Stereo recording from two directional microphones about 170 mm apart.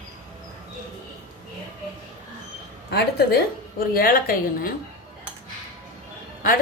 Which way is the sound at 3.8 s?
60° left (ahead or behind).